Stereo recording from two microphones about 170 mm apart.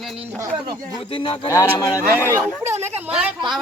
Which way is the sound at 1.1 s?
30° left (ahead or behind).